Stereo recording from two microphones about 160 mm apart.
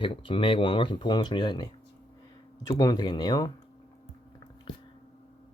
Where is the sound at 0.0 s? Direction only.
30° left (ahead or behind).